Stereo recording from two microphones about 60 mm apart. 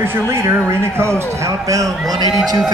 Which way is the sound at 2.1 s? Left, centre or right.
Right.